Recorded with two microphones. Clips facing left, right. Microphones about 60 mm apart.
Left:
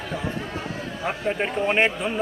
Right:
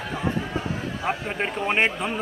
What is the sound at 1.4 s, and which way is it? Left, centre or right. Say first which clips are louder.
Speech: left 1 dB; centre.